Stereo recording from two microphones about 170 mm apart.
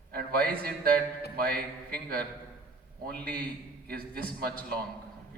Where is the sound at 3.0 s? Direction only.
60° right (ahead or behind).